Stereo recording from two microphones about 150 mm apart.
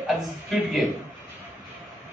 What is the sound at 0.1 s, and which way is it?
Speech, centre (ahead or behind).